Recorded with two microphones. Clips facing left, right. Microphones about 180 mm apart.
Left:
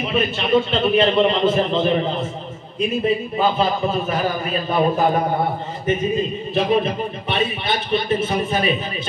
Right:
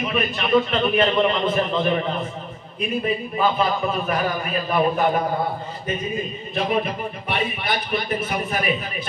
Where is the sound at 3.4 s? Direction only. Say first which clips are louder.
Even; 30° left (ahead or behind).